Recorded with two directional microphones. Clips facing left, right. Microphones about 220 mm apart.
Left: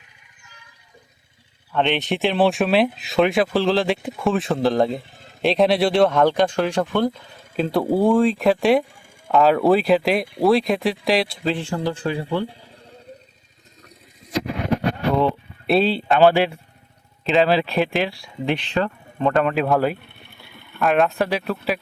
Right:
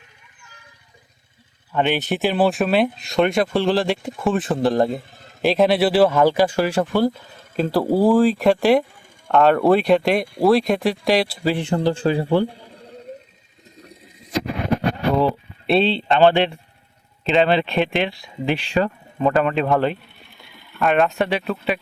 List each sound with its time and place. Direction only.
1.7 s speech: 5° right (ahead or behind)
11.5 s speech: 20° right (ahead or behind)
11.8 s speech: 30° right (ahead or behind)
15.1 s speech: centre (ahead or behind)